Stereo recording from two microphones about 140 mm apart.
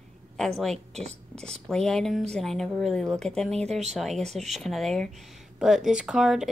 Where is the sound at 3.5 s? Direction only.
50° right (ahead or behind).